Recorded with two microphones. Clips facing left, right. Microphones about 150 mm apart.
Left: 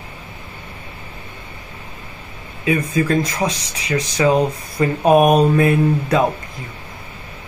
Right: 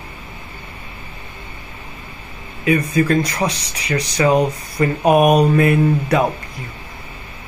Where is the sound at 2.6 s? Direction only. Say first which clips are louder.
Right 2 dB; 20° left (ahead or behind).